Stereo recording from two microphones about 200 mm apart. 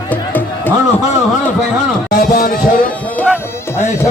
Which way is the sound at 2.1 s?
45° left (ahead or behind).